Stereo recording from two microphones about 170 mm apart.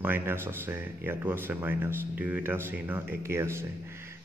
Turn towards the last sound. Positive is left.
turn(degrees=-15)  # may be behind; listen again after turning